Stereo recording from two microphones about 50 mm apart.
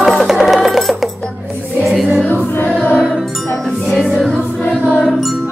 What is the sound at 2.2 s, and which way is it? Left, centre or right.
Choir, left.